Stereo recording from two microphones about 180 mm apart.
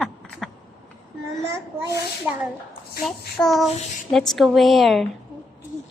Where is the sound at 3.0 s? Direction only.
Centre (ahead or behind).